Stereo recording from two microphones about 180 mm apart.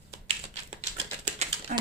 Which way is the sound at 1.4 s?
35° right (ahead or behind).